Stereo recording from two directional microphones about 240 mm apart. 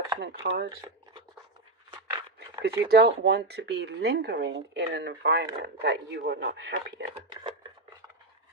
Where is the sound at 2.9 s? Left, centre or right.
Right.